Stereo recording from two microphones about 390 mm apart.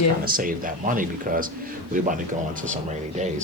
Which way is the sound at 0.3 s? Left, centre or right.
Right.